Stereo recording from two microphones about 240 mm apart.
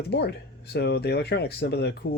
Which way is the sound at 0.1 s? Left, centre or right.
Left.